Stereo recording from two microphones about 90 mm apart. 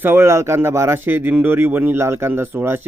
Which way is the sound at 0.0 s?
25° right (ahead or behind).